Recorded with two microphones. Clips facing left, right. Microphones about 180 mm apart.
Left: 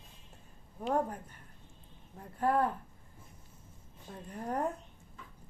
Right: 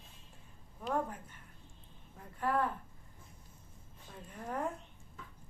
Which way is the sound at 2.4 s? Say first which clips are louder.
Left 4 dB; 35° left (ahead or behind).